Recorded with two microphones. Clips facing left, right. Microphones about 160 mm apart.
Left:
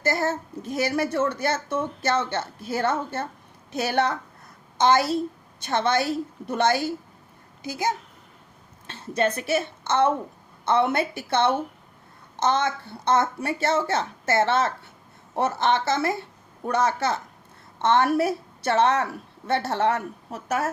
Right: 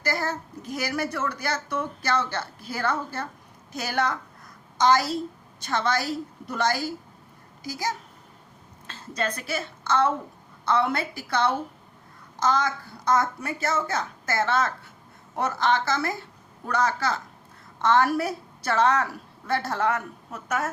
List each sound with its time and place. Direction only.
0.0 s a woman's voice: 25° left (ahead or behind)
5.6 s a woman's voice: 25° left (ahead or behind)